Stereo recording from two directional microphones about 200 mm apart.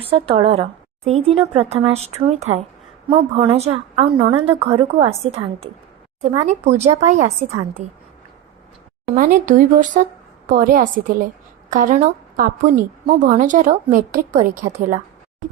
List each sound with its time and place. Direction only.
0.1 s speech: 30° right (ahead or behind)
9.0 s a woman's voice: 45° right (ahead or behind)